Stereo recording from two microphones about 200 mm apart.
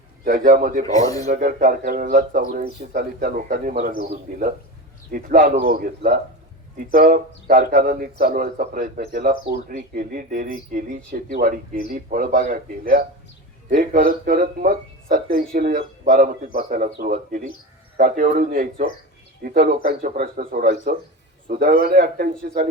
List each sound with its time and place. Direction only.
0.3 s a man's voice: 45° right (ahead or behind)
0.9 s speech: 15° left (ahead or behind)
1.2 s a man's voice: 40° right (ahead or behind)